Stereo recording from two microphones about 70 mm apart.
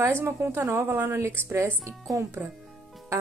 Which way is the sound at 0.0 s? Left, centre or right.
Right.